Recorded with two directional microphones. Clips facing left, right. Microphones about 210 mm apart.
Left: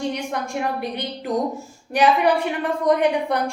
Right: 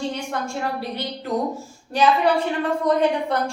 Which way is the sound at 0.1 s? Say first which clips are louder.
Left 1 dB; 15° left (ahead or behind).